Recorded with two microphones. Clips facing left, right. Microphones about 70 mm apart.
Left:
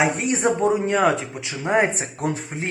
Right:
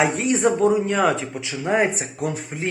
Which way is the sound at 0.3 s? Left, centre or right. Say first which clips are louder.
Right 2 dB; left.